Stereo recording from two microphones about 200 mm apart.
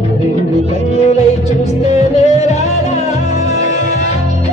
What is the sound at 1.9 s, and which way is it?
Music, 35° left (ahead or behind).